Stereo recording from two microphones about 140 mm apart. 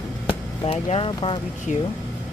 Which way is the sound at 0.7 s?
40° left (ahead or behind).